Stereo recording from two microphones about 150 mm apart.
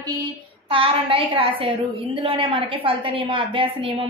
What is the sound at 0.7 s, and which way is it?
A woman's voice, 35° right (ahead or behind).